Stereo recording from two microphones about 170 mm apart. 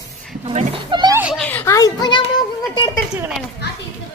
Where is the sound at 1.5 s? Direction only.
15° left (ahead or behind).